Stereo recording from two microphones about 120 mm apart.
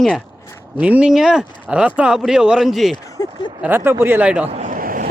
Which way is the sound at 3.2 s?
35° left (ahead or behind).